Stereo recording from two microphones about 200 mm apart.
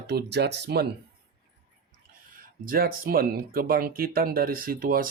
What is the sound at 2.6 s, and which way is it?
Speech, 45° right (ahead or behind).